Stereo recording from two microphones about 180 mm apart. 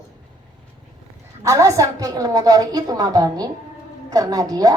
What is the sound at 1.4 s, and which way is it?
A woman's voice, 15° right (ahead or behind).